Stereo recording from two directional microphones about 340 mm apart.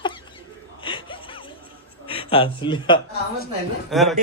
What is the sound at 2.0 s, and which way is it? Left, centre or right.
Speech, centre.